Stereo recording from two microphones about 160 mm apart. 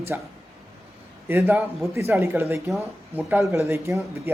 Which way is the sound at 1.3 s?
15° right (ahead or behind).